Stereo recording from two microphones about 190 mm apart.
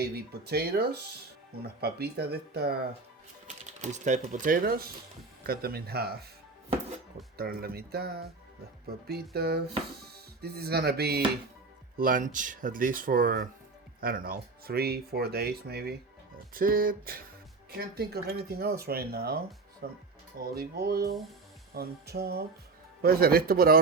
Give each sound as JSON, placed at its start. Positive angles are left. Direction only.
{"t": 0.0, "sound": "speech", "side_deg": -55}
{"t": 3.8, "sound": "speech", "side_deg": -40}
{"t": 7.3, "sound": "speech", "side_deg": -55}